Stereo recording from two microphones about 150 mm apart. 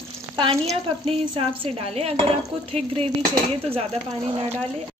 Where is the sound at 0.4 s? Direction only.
40° right (ahead or behind).